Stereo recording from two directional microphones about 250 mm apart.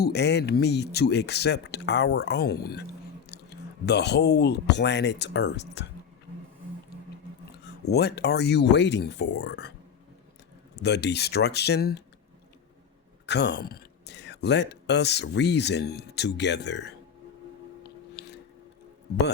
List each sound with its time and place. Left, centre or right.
0.0 s speech: left
7.6 s speech: left
10.8 s speech: left
13.2 s speech: left
17.8 s biting: left